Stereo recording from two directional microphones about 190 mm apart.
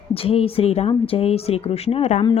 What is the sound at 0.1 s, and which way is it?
Speech, 30° left (ahead or behind).